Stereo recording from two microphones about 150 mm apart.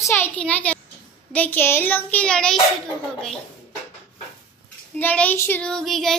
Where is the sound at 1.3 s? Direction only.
10° left (ahead or behind).